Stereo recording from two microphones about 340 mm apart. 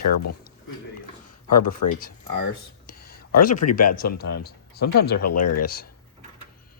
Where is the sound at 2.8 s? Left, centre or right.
Left.